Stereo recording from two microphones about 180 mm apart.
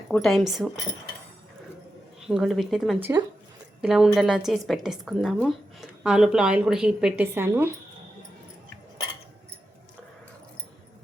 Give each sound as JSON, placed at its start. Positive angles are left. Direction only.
{"t": 0.1, "sound": "a woman's voice", "side_deg": 0}
{"t": 2.2, "sound": "a woman's voice", "side_deg": 0}
{"t": 3.0, "sound": "speech", "side_deg": -20}
{"t": 3.8, "sound": "a woman's voice", "side_deg": 0}